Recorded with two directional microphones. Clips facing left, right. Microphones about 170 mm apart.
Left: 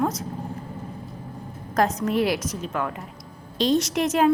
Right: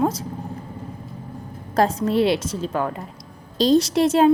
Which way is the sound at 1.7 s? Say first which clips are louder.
Right 3 dB; 30° right (ahead or behind).